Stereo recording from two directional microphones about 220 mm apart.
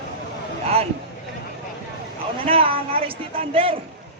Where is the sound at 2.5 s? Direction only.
25° right (ahead or behind).